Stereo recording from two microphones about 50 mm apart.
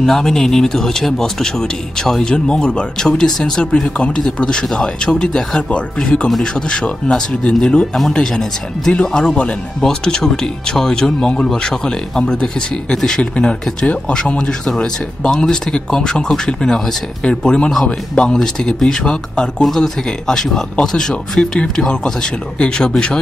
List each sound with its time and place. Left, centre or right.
0.0 s speech: centre